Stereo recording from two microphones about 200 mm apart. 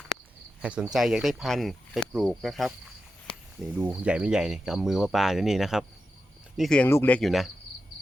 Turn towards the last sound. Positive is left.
turn(degrees=0)  # may be behind; listen again after turning